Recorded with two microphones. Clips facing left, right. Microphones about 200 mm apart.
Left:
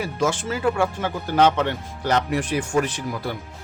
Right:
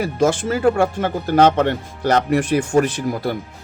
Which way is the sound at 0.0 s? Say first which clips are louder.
Right 6 dB; 45° right (ahead or behind).